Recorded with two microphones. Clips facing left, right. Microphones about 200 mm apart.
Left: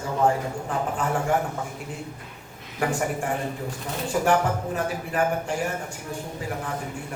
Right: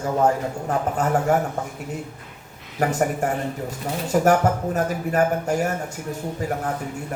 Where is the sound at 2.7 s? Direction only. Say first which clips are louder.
Right 4 dB; 45° right (ahead or behind).